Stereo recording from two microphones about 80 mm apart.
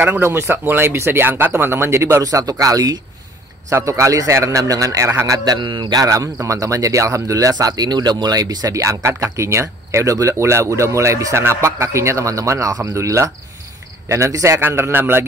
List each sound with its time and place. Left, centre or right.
0.0 s speech: right
2.2 s speech: right
3.7 s speech: right
5.9 s speech: right